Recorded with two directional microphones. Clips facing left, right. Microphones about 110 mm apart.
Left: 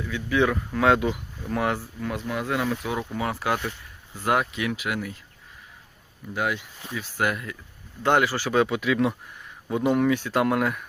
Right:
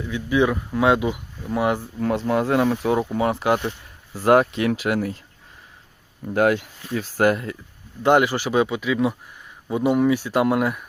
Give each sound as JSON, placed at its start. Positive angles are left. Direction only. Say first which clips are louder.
{"t": 0.0, "sound": "speech", "louder": "right 3 dB", "side_deg": -20}
{"t": 2.0, "sound": "speech", "louder": "right 8 dB", "side_deg": -40}
{"t": 4.1, "sound": "speech", "louder": "right 8 dB", "side_deg": -35}
{"t": 6.3, "sound": "speech", "louder": "right 9 dB", "side_deg": -50}
{"t": 6.9, "sound": "speech", "louder": "right 7 dB", "side_deg": -40}
{"t": 8.0, "sound": "speech", "louder": "right 4 dB", "side_deg": -15}
{"t": 8.6, "sound": "speech", "louder": "right 1 dB", "side_deg": 0}